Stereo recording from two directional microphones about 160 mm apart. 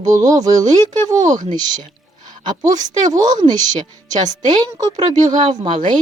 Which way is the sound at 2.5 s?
25° right (ahead or behind).